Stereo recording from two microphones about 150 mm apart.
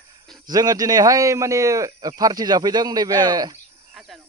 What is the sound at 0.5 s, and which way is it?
Speech, 25° right (ahead or behind).